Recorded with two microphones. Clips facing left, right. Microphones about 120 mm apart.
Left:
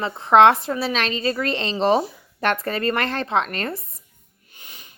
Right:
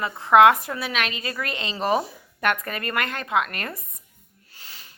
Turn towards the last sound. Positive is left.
turn(degrees=20)  # may be behind; listen again after turning